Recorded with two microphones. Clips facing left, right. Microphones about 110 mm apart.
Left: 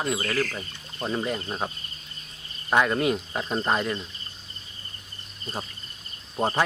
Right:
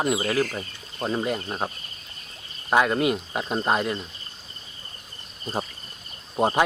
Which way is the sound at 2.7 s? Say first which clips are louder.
Right 1 dB; 10° right (ahead or behind).